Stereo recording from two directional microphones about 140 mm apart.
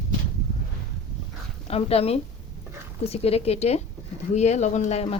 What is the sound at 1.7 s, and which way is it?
Speech, 45° left (ahead or behind).